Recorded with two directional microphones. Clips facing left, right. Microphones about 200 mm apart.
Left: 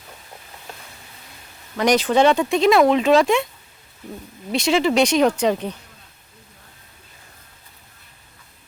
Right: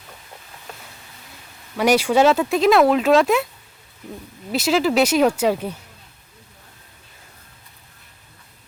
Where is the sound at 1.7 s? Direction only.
5° right (ahead or behind).